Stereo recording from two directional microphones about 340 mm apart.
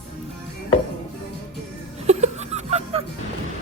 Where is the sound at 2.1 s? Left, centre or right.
Centre.